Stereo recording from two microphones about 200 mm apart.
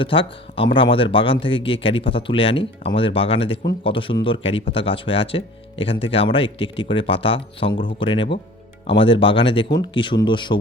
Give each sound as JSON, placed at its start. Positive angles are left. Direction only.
{"t": 0.0, "sound": "speech", "side_deg": 25}